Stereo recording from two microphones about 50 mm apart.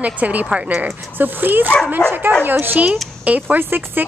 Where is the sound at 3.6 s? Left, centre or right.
Right.